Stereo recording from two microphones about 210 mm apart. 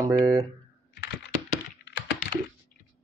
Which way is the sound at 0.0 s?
15° right (ahead or behind).